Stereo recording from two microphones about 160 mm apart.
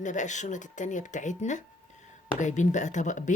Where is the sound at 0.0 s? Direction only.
50° left (ahead or behind).